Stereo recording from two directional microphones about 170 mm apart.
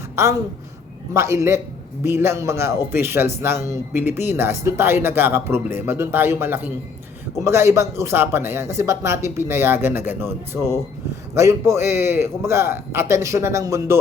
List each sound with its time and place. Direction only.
0.2 s speech: 15° right (ahead or behind)